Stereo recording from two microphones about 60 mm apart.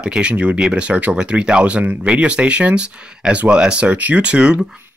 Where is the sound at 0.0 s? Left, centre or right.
Centre.